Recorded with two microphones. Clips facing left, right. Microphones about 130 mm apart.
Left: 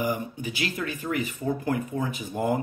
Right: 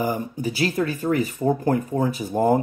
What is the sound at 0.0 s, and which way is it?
Speech, 35° right (ahead or behind).